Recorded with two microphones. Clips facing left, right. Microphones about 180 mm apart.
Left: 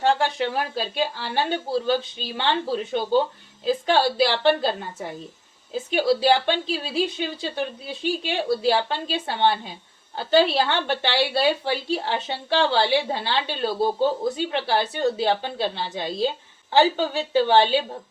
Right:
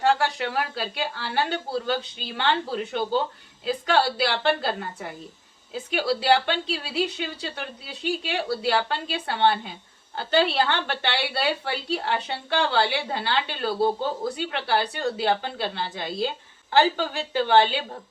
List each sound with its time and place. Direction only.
0.2 s a woman's voice: 25° left (ahead or behind)